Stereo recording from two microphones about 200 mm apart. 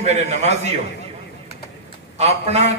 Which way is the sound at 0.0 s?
35° right (ahead or behind).